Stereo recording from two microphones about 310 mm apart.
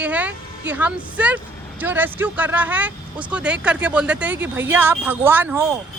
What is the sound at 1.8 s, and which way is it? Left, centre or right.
Speech, centre.